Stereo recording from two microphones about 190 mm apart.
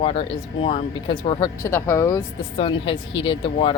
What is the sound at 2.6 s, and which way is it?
Speech, 25° left (ahead or behind).